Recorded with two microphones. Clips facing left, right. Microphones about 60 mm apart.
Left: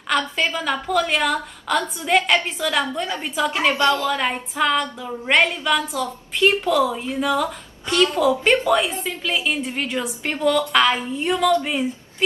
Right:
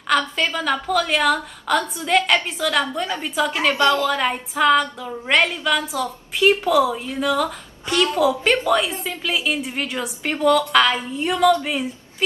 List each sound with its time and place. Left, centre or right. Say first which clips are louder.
0.1 s a woman's voice: right 1 dB; centre
3.7 s a woman's voice: right 4 dB; left
4.0 s a woman's voice: right 1 dB; centre
8.5 s a woman's voice: left 1 dB; centre
11.6 s female singing: left 1 dB; centre